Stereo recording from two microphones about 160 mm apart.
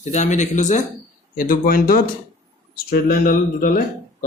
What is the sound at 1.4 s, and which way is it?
Speech, 65° left (ahead or behind).